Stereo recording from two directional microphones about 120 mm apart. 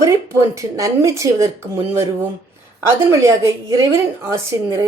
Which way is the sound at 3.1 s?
25° right (ahead or behind).